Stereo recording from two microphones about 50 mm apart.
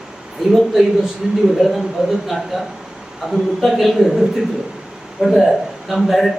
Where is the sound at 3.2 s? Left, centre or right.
Centre.